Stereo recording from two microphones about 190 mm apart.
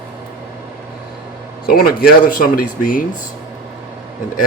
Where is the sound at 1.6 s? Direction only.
50° left (ahead or behind).